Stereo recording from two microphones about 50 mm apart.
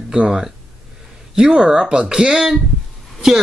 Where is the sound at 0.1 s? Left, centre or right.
Centre.